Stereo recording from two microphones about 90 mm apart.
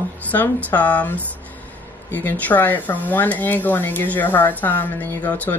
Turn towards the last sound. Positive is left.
turn(degrees=15)  # may be behind; listen again after turning